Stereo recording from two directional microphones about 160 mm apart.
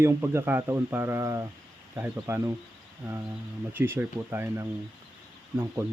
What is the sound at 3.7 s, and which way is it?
Speech, 15° right (ahead or behind).